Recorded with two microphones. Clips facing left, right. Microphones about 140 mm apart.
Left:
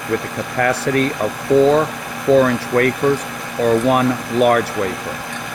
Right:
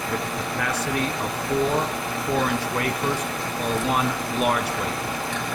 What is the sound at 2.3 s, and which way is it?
Speech, 75° left (ahead or behind).